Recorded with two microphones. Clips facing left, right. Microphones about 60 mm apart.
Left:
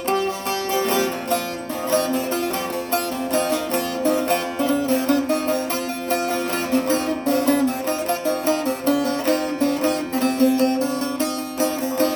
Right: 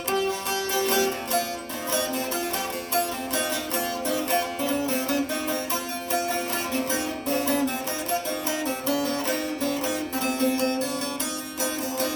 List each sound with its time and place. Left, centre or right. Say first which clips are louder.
9.6 s music: left 7 dB; left